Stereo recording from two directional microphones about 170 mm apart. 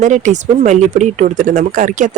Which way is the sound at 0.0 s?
45° right (ahead or behind).